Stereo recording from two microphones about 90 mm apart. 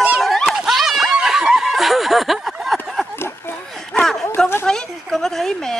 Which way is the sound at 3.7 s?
5° left (ahead or behind).